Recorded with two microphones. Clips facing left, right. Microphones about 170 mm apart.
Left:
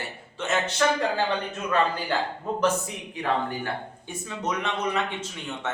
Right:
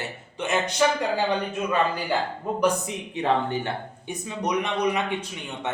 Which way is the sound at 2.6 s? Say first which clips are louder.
Right 2 dB; 20° right (ahead or behind).